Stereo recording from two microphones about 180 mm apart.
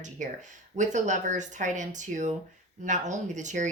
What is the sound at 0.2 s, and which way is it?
Speech, 45° right (ahead or behind).